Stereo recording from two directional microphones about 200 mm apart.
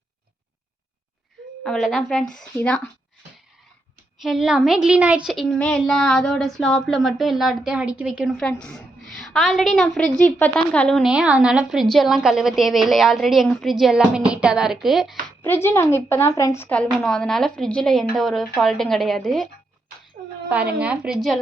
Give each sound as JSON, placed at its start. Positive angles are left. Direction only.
{"t": 1.6, "sound": "a woman's voice", "side_deg": 5}
{"t": 4.2, "sound": "a woman's voice", "side_deg": 0}
{"t": 15.4, "sound": "a woman's voice", "side_deg": 10}
{"t": 20.5, "sound": "a woman's voice", "side_deg": -5}